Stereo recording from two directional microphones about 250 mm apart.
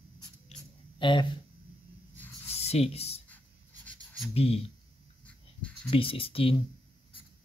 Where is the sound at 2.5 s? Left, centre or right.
Left.